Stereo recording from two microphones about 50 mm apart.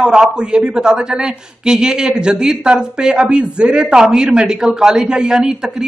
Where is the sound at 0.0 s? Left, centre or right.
Centre.